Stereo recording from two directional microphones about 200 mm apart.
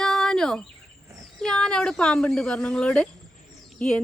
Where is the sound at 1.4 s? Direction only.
5° left (ahead or behind).